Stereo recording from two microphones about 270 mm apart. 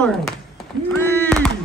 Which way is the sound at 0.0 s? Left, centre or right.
Centre.